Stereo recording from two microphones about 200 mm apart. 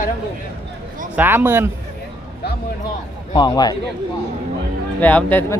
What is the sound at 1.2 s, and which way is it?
Speech, 10° right (ahead or behind).